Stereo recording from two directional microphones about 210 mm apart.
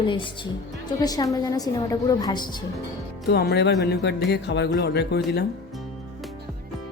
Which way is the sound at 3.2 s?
50° left (ahead or behind).